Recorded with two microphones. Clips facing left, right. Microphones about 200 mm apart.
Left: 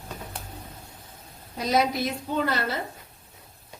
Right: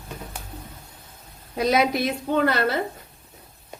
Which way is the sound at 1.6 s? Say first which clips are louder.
Right 3 dB; 65° right (ahead or behind).